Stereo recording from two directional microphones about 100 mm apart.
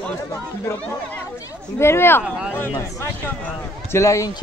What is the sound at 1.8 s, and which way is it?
Speech, 25° left (ahead or behind).